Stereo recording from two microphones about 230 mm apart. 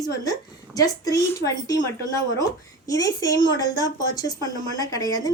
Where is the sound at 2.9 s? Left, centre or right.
Centre.